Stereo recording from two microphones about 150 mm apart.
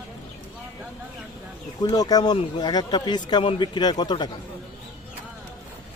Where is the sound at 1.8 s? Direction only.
25° left (ahead or behind).